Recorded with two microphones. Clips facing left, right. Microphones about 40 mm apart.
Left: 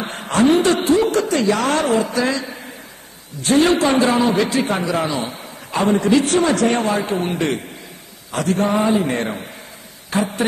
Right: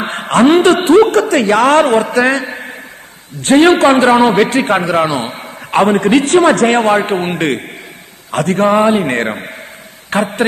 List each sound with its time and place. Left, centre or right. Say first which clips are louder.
0.0 s a man's voice: right 6 dB; right